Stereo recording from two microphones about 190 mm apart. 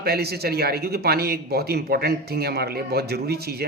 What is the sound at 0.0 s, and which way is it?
Speech, 55° right (ahead or behind).